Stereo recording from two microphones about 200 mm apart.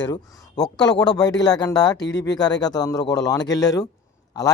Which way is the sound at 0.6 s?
20° left (ahead or behind).